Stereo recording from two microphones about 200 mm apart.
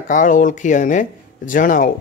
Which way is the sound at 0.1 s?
40° left (ahead or behind).